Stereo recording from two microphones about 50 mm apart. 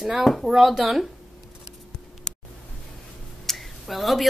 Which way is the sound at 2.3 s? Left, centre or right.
Centre.